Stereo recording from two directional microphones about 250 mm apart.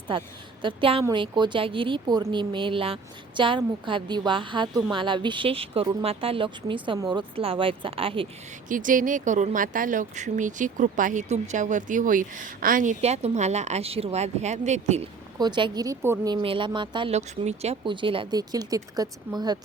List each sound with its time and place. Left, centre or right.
0.6 s speech: right
8.7 s speech: right; by 19.5 s centre